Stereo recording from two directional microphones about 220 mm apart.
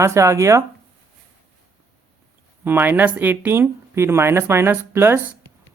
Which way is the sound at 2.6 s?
10° right (ahead or behind).